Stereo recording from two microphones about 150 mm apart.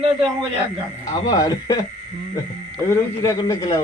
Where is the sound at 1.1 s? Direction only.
25° left (ahead or behind).